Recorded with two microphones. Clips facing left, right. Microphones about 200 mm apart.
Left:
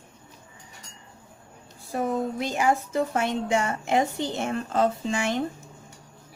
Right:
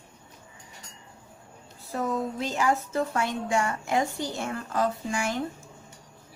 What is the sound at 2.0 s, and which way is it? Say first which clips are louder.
Speech: left 2 dB; 25° left (ahead or behind).